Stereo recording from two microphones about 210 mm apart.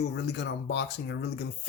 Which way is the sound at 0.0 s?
55° left (ahead or behind).